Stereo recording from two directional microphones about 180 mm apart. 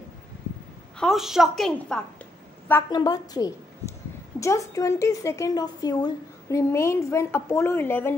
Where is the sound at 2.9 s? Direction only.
20° left (ahead or behind).